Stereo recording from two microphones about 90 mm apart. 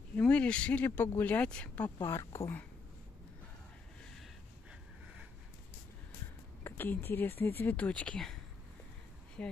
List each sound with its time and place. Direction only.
0.2 s speech: 10° left (ahead or behind)
2.0 s a woman's voice: 30° left (ahead or behind)
6.6 s speech: 25° left (ahead or behind)
9.4 s speech: 10° left (ahead or behind)